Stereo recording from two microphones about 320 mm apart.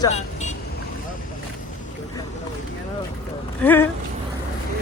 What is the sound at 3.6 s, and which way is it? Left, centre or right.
Speech, centre.